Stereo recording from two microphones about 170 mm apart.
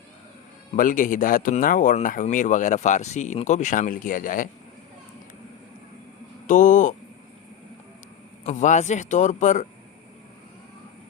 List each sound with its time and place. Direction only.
0.8 s speech: 55° left (ahead or behind)
6.5 s speech: 50° left (ahead or behind)
8.4 s speech: 45° left (ahead or behind)